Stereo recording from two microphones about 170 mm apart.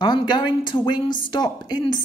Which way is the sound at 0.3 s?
25° left (ahead or behind).